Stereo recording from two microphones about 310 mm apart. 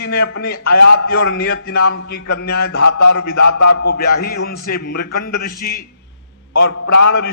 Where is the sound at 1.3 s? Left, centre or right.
Left.